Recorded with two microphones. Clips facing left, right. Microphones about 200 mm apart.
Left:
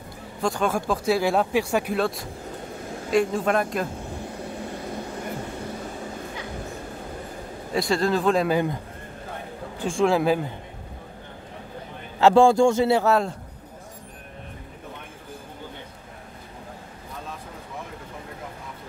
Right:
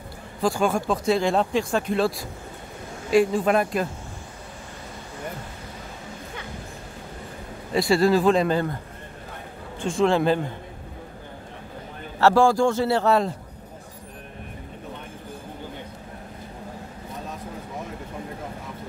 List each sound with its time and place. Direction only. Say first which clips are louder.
0.4 s speech: right 2 dB; centre (ahead or behind)
1.9 s speech: right 2 dB; centre (ahead or behind)
7.7 s speech: right 4 dB; 5° right (ahead or behind)
9.8 s speech: even; centre (ahead or behind)
12.2 s a man's voice: left 2 dB; 20° left (ahead or behind)
13.0 s speech: right 1 dB; centre (ahead or behind)